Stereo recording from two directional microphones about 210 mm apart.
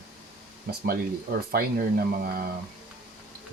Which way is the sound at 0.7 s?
45° right (ahead or behind).